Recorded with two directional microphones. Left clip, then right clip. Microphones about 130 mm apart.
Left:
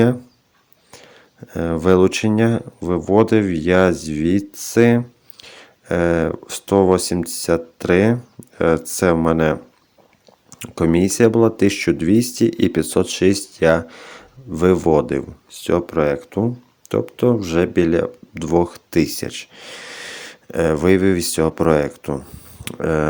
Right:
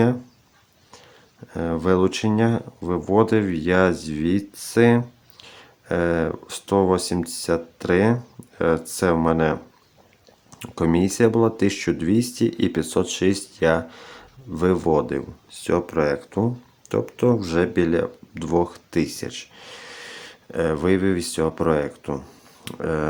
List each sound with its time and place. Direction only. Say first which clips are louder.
0.9 s speech: left 5 dB; 25° left (ahead or behind)
22.1 s speech: left 4 dB; 15° left (ahead or behind)
22.6 s speech: left 5 dB; 30° left (ahead or behind)